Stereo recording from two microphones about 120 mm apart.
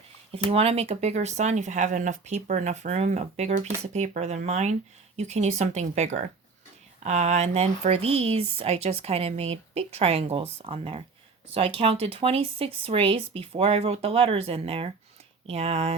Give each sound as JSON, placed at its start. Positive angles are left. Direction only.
{"t": 0.5, "sound": "speech", "side_deg": -55}